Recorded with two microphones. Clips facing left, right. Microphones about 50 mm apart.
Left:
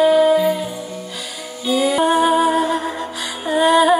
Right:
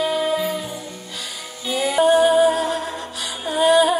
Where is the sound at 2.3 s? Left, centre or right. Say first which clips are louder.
Even; left.